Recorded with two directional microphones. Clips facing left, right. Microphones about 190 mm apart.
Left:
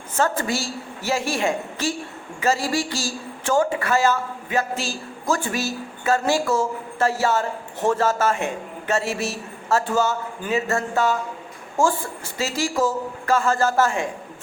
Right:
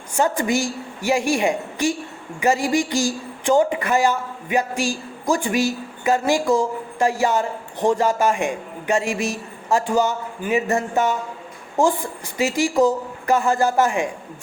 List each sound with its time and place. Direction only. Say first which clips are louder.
0.1 s a woman's voice: right 3 dB; 15° right (ahead or behind)